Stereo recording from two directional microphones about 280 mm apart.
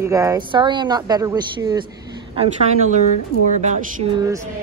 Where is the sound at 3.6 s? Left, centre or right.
Right.